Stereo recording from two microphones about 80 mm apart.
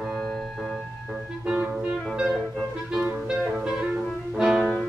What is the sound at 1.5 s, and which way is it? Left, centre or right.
Music, centre.